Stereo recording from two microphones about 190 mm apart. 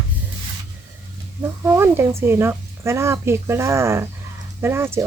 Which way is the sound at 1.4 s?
15° right (ahead or behind).